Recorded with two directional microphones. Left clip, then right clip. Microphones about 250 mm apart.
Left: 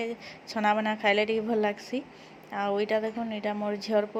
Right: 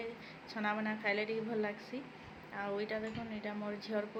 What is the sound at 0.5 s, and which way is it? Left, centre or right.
A woman's voice, left.